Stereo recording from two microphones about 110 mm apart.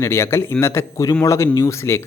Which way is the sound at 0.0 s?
25° left (ahead or behind).